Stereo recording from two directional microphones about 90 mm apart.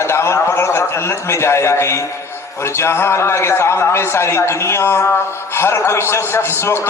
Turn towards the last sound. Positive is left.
turn(degrees=30)  # may be behind; listen again after turning